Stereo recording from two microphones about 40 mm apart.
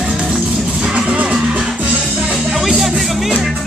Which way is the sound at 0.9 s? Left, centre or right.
Right.